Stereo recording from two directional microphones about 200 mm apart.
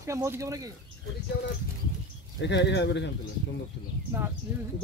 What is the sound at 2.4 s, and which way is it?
Speech, 60° left (ahead or behind).